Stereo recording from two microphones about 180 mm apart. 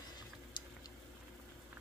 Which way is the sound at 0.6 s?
25° left (ahead or behind).